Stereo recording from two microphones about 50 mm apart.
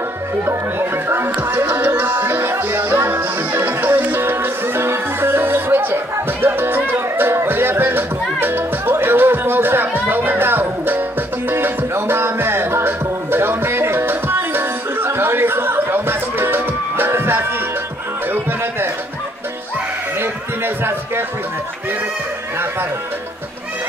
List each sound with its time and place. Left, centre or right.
0.5 s speech: right
1.4 s music: right
2.2 s music: right
4.2 s music: right
20.2 s a sound: right